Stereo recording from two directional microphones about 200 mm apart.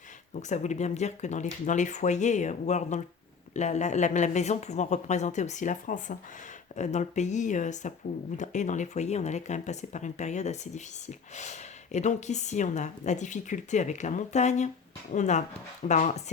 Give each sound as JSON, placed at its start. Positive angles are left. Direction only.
{"t": 0.3, "sound": "speech", "side_deg": 35}